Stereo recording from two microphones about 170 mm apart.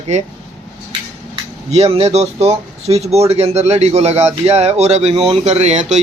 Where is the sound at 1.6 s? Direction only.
40° right (ahead or behind).